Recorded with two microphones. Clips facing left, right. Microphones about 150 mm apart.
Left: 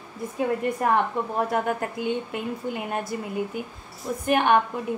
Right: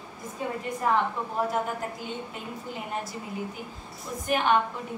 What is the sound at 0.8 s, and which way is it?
Speech, 60° left (ahead or behind).